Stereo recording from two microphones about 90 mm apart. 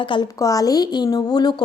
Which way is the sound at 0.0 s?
65° left (ahead or behind).